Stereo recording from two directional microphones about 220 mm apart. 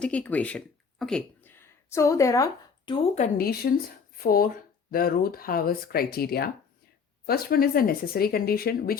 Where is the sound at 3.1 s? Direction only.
35° left (ahead or behind).